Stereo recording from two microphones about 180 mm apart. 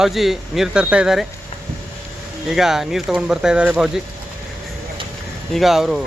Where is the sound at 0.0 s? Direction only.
Centre (ahead or behind).